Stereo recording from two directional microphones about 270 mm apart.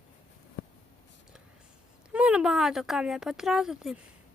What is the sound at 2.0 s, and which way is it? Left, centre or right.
Speech, centre.